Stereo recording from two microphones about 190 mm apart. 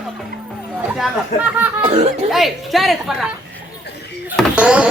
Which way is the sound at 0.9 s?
5° right (ahead or behind).